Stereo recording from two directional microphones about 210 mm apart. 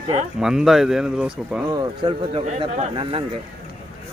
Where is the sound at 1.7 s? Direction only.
20° right (ahead or behind).